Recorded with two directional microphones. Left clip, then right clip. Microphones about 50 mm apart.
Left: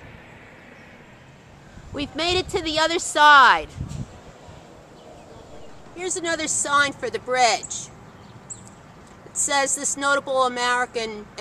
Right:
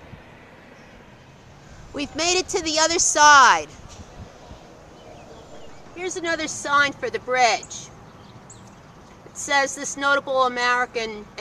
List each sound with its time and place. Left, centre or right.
2.0 s speech: right
5.9 s a woman's voice: centre
9.5 s speech: centre